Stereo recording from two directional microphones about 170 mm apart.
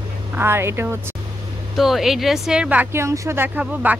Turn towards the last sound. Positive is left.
turn(degrees=-10)  # may be behind; listen again after turning